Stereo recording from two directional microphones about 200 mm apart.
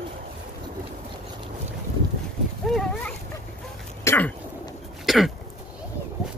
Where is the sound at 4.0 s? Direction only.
10° left (ahead or behind).